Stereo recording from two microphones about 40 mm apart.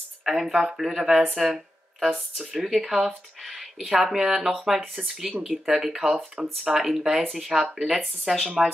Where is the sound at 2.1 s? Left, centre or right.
Centre.